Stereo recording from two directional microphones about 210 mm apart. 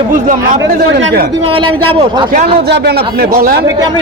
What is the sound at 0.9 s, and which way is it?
Speech, 50° right (ahead or behind).